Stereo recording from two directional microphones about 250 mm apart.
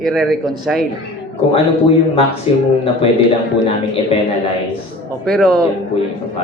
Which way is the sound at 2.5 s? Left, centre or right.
Left.